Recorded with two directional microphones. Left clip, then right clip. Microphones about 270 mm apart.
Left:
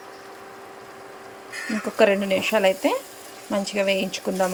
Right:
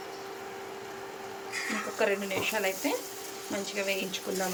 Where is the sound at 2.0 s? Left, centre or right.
Centre.